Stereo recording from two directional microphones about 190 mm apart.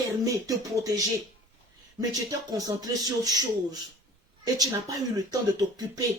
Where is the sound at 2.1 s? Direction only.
20° right (ahead or behind).